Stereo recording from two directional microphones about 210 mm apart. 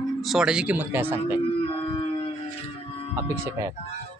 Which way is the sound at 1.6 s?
25° left (ahead or behind).